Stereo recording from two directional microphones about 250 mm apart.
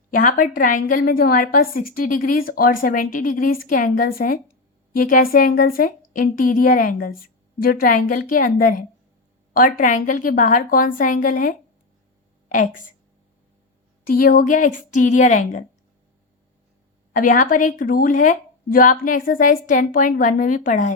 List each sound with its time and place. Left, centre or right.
0.1 s a woman's voice: left
14.0 s a woman's voice: left
17.2 s a woman's voice: left